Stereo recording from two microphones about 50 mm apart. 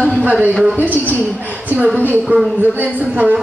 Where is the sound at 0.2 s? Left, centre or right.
Right.